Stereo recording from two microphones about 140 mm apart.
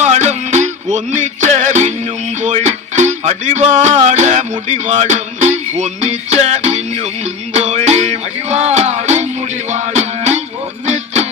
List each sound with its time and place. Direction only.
0.0 s music: 55° right (ahead or behind)